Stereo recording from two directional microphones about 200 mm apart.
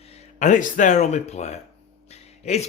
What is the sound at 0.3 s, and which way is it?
Speech, 40° left (ahead or behind).